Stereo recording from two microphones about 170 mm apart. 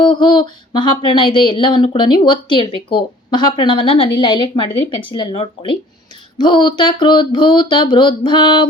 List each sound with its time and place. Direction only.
0.0 s speech: 25° left (ahead or behind)